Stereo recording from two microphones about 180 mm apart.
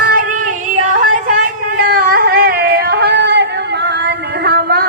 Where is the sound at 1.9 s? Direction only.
55° right (ahead or behind).